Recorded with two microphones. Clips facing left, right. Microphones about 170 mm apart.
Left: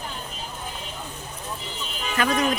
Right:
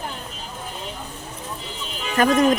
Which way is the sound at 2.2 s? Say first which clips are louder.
Right 6 dB; 45° right (ahead or behind).